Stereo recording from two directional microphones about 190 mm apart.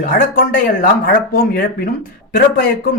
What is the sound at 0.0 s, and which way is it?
Speech, 50° left (ahead or behind).